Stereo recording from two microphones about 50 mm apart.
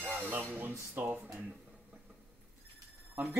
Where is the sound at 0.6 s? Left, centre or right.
Right.